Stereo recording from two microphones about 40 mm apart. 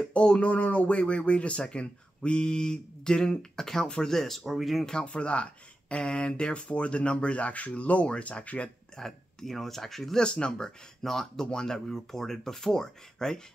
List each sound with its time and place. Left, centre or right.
0.1 s speech: left
2.4 s speech: centre
4.1 s speech: centre
5.0 s speech: left
8.9 s speech: centre
10.2 s speech: left
11.0 s speech: centre